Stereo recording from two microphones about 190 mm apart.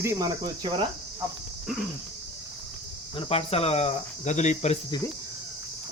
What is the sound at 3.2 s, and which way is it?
Speech, 30° left (ahead or behind).